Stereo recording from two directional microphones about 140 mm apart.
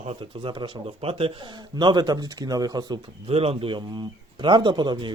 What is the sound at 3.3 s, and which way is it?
Speech, 45° right (ahead or behind).